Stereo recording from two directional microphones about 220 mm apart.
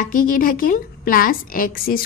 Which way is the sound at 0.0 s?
40° left (ahead or behind).